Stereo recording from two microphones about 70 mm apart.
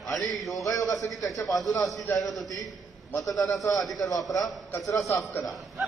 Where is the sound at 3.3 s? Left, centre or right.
Left.